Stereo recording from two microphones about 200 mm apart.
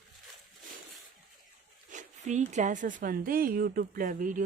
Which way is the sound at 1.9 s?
40° right (ahead or behind).